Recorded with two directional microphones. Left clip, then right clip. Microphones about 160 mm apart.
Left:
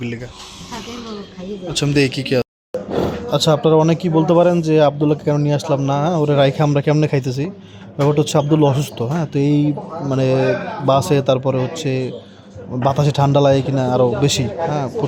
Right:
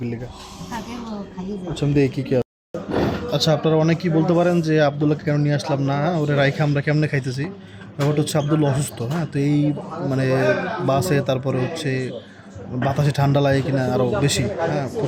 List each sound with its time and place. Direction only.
1.7 s speech: 5° left (ahead or behind)
3.2 s speech: 20° left (ahead or behind)